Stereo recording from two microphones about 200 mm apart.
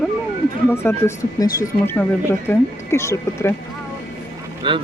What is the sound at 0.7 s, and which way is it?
Speech, 10° left (ahead or behind).